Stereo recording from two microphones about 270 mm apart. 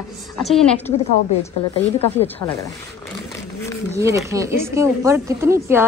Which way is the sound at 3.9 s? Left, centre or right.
Centre.